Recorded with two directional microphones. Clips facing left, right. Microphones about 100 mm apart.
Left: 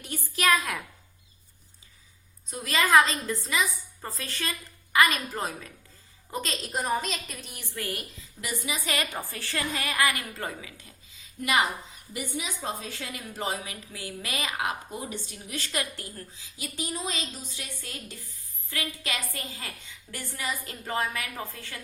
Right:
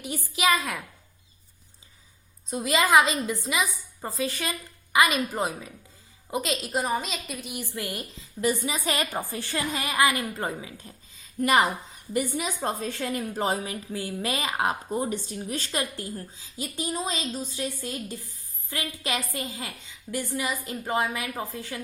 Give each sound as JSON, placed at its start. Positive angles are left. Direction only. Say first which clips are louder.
{"t": 0.0, "sound": "a woman's voice", "louder": "right 2 dB", "side_deg": -5}
{"t": 2.5, "sound": "a woman's voice", "louder": "right 2 dB", "side_deg": -25}
{"t": 8.2, "sound": "a woman's voice", "louder": "right 9 dB", "side_deg": -30}
{"t": 11.2, "sound": "a sound", "louder": "right 4 dB", "side_deg": -40}
{"t": 12.1, "sound": "a woman's voice", "louder": "right 7 dB", "side_deg": -50}